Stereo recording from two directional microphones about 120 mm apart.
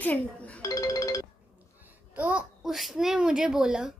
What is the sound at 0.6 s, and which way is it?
Music, 25° left (ahead or behind).